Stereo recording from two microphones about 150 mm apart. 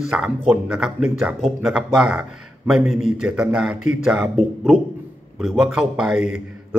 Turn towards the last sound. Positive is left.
turn(degrees=-5)  # may be behind; listen again after turning